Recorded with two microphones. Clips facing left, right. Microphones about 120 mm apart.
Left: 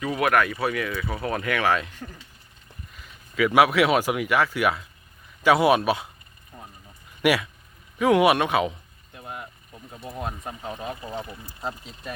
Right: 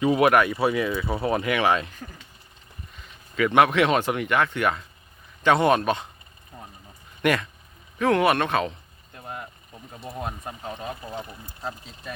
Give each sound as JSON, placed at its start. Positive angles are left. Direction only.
{"t": 0.0, "sound": "speech", "side_deg": -25}
{"t": 2.0, "sound": "speech", "side_deg": -5}
{"t": 6.5, "sound": "a sound", "side_deg": -15}
{"t": 7.2, "sound": "speech", "side_deg": 5}
{"t": 9.1, "sound": "vehicle", "side_deg": 10}
{"t": 9.7, "sound": "speech", "side_deg": 5}
{"t": 11.6, "sound": "speech", "side_deg": 0}